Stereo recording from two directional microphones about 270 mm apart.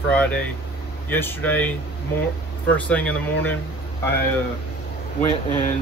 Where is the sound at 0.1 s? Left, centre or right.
Centre.